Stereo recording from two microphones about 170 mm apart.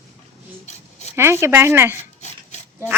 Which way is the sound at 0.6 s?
40° left (ahead or behind).